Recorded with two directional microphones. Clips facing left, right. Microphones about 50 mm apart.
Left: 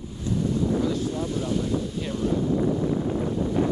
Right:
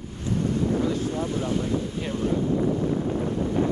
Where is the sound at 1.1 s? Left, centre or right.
Right.